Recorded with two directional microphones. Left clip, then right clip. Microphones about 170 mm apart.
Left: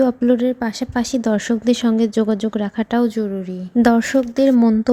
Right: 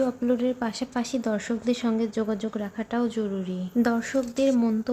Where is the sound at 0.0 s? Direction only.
40° left (ahead or behind).